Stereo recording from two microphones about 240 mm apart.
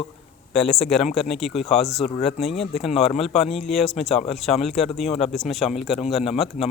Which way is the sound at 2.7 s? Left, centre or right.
Left.